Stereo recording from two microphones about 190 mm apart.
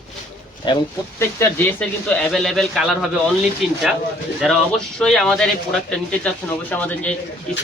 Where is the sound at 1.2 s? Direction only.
10° left (ahead or behind).